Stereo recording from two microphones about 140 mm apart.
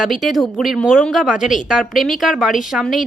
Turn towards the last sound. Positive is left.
turn(degrees=0)  # may be behind; listen again after turning